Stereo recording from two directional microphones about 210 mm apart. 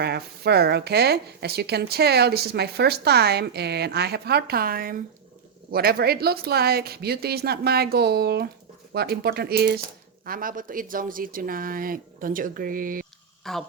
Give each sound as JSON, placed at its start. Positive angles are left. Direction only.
{"t": 0.0, "sound": "speech", "side_deg": -50}
{"t": 13.4, "sound": "speech", "side_deg": 0}